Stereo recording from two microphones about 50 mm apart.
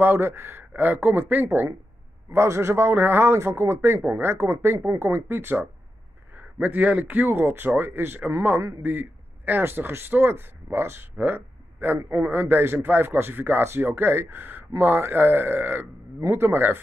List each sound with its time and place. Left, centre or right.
0.0 s speech: right
0.7 s speech: right
2.3 s a man's voice: right
7.2 s a man's voice: right
9.6 s speech: right
11.1 s a sound: right
12.1 s speech: right
16.3 s speech: right